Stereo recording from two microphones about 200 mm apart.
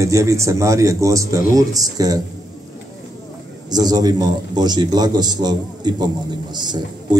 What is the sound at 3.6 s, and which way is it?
A man's voice, 20° right (ahead or behind).